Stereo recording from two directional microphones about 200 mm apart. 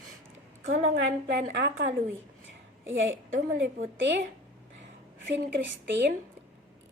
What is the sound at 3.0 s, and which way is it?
Speech, 70° right (ahead or behind).